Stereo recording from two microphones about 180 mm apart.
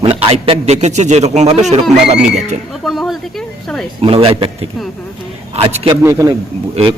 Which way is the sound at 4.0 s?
30° right (ahead or behind).